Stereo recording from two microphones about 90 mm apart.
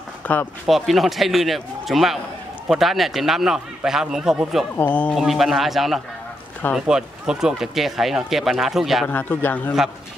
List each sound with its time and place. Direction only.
0.2 s speech: 20° left (ahead or behind)
0.7 s speech: centre (ahead or behind)
4.7 s speech: 20° left (ahead or behind)
5.1 s speech: centre (ahead or behind)
9.0 s speech: 20° left (ahead or behind)